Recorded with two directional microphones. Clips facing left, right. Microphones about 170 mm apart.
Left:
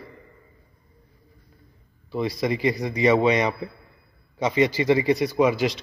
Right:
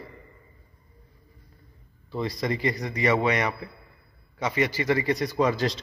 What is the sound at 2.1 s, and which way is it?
A man's voice, 10° left (ahead or behind).